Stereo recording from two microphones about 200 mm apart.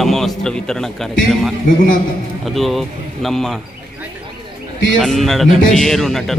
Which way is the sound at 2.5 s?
Centre (ahead or behind).